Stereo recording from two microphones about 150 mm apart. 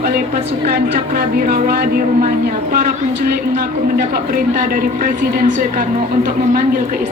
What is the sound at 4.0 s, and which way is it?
A woman's voice, 60° right (ahead or behind).